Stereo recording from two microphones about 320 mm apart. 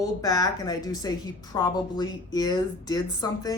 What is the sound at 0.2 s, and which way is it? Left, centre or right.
A woman's voice, centre.